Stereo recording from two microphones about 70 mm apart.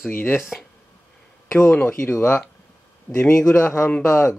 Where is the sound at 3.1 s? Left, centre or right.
Left.